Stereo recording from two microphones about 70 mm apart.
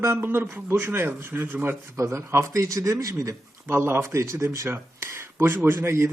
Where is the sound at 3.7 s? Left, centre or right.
Right.